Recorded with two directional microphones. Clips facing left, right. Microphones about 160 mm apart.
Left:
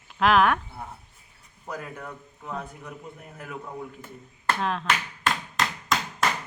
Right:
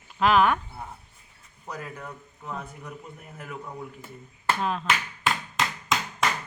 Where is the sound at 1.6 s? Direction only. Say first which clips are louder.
Left 1 dB; centre (ahead or behind).